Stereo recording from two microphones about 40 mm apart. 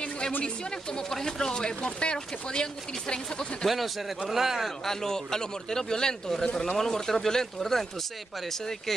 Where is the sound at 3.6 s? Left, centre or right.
Centre.